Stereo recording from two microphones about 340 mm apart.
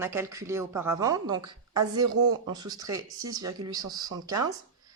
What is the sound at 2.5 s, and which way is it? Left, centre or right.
Speech, centre.